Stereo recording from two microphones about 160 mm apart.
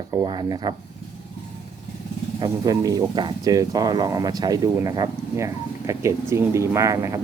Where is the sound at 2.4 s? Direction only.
20° right (ahead or behind).